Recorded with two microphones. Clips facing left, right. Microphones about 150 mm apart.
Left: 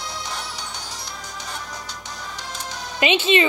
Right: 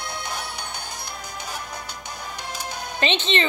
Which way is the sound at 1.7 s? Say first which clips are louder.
Even; 55° right (ahead or behind).